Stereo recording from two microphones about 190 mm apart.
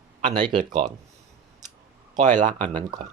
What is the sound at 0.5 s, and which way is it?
Speech, 45° right (ahead or behind).